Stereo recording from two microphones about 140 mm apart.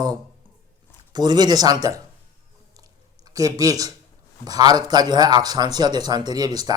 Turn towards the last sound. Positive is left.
turn(degrees=-30)  # may be behind; listen again after turning